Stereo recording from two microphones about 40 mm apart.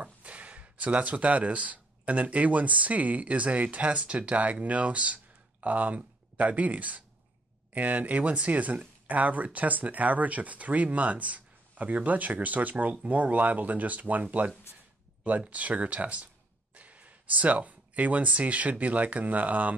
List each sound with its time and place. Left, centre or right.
0.0 s speech: right
15.5 s speech: right